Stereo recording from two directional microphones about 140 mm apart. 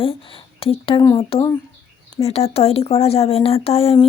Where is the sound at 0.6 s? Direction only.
40° left (ahead or behind).